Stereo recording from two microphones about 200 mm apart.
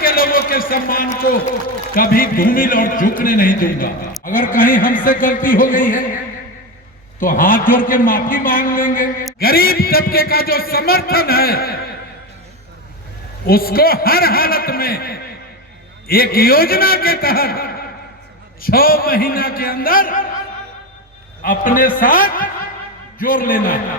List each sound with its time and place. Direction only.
0.0 s a man's voice: 45° left (ahead or behind)
7.2 s a man's voice: 45° left (ahead or behind)
13.5 s a man's voice: 50° left (ahead or behind)
21.4 s a man's voice: 45° left (ahead or behind)